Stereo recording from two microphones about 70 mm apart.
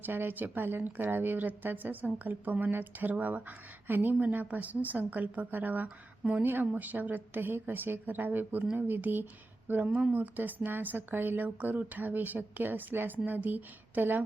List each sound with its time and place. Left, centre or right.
0.0 s speech: right